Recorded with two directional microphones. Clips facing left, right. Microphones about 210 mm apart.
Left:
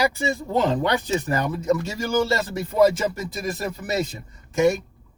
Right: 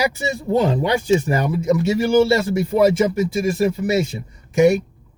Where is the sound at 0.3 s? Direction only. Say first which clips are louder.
Right 3 dB; 10° right (ahead or behind).